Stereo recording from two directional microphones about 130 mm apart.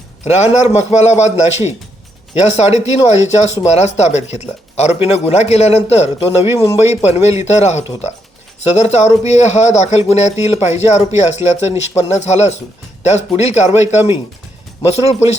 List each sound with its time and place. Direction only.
0.3 s speech: 60° left (ahead or behind)